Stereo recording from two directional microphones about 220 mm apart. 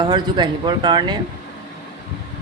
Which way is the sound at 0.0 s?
20° right (ahead or behind).